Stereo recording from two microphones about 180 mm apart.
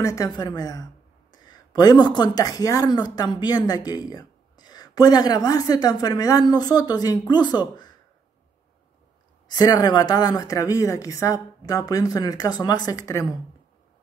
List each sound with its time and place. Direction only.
0.0 s speech: 20° left (ahead or behind)
9.5 s speech: 20° left (ahead or behind)